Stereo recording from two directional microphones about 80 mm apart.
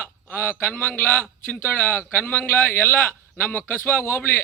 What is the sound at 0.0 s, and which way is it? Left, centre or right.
A man's voice, left.